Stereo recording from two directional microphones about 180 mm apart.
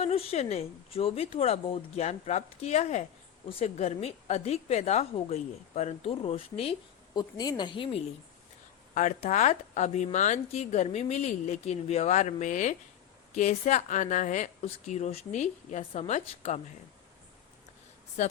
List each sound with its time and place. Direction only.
0.0 s a woman's voice: 35° left (ahead or behind)
9.0 s a woman's voice: 45° left (ahead or behind)